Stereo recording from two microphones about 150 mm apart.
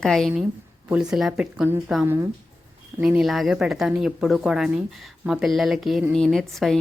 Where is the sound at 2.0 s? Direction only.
15° right (ahead or behind).